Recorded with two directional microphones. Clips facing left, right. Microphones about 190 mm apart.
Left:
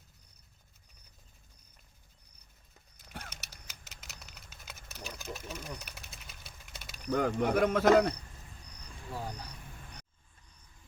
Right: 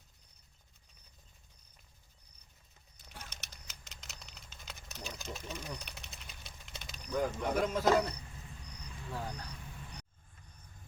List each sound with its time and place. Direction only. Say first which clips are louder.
3.2 s a sound: left 2 dB; 5° left (ahead or behind)
7.1 s speech: left 5 dB; 65° left (ahead or behind)
9.1 s speech: left 1 dB; 10° left (ahead or behind)